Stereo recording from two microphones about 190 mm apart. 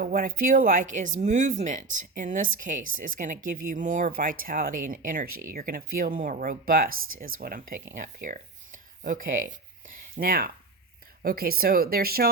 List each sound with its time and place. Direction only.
0.0 s speech: 50° right (ahead or behind)
6.9 s speech: 90° right
7.3 s speech: 50° right (ahead or behind)